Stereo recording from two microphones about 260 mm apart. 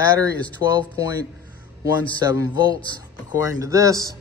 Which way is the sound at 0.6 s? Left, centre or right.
Centre.